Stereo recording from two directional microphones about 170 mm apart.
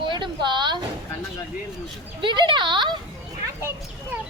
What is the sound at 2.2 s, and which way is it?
Speech, 30° right (ahead or behind).